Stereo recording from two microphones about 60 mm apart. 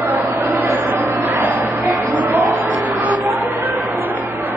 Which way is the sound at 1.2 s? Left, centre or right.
Right.